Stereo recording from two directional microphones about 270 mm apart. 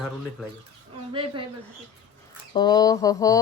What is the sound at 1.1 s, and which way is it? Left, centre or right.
Speech, centre.